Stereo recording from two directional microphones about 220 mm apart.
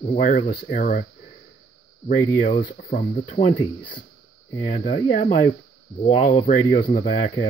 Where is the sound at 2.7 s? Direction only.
35° left (ahead or behind).